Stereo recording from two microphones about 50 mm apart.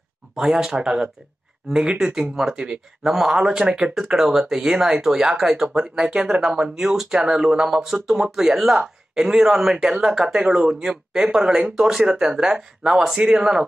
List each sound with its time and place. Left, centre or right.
0.4 s speech: centre
3.0 s speech: centre
3.6 s speech: right
3.9 s speech: centre